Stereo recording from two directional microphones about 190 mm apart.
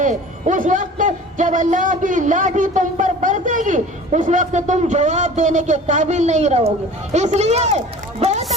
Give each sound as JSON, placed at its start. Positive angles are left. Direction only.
{"t": 0.0, "sound": "a man's voice", "side_deg": -40}